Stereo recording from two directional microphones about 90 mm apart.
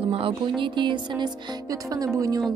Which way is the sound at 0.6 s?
60° right (ahead or behind).